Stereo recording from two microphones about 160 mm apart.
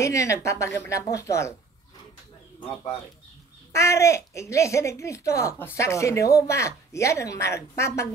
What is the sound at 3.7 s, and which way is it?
Speech, 20° left (ahead or behind).